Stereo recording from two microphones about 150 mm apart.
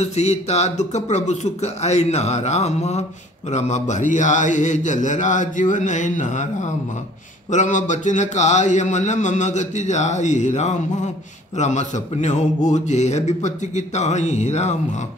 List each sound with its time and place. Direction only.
0.0 s a man's voice: 45° left (ahead or behind)